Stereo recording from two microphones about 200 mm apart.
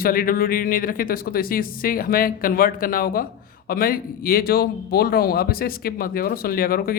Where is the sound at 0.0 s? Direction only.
45° left (ahead or behind).